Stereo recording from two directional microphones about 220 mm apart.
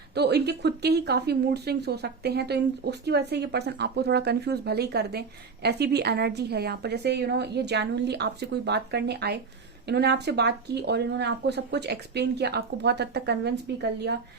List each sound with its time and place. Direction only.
0.1 s speech: 50° right (ahead or behind)